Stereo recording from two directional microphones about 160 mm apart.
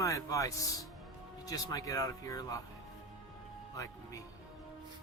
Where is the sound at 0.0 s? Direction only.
20° left (ahead or behind).